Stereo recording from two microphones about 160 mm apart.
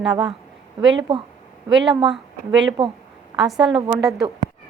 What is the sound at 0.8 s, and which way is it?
Speech, 30° right (ahead or behind).